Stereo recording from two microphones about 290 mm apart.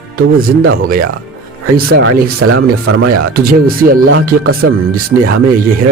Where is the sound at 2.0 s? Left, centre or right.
Right.